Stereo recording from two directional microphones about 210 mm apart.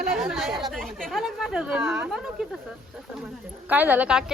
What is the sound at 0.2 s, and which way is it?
Speech, centre (ahead or behind).